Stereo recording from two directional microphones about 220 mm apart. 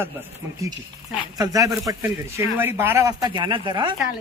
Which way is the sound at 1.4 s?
15° right (ahead or behind).